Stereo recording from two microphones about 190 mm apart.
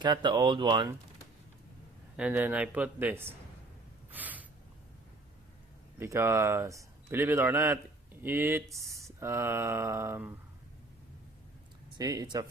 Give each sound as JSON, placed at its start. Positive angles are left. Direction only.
{"t": 0.0, "sound": "speech", "side_deg": -25}
{"t": 2.1, "sound": "a man's voice", "side_deg": -5}
{"t": 4.1, "sound": "a sound", "side_deg": -10}
{"t": 6.0, "sound": "a man's voice", "side_deg": -15}
{"t": 11.9, "sound": "speech", "side_deg": -20}